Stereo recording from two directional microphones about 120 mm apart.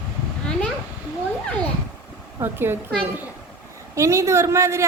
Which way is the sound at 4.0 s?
25° right (ahead or behind).